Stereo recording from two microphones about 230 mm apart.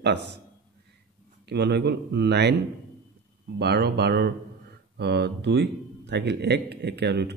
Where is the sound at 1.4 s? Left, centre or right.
Right.